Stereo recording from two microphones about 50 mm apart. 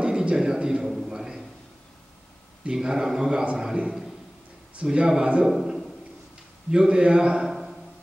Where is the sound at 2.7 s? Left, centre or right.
Centre.